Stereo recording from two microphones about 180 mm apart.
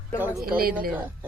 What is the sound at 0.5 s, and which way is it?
Speech, 55° right (ahead or behind).